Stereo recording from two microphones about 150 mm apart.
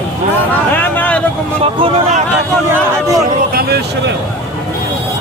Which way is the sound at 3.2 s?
85° right.